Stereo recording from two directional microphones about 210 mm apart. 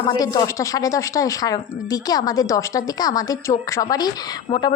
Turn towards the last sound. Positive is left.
turn(degrees=20)  # may be behind; listen again after turning